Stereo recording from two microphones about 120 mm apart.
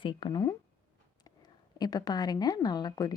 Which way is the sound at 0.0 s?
40° left (ahead or behind).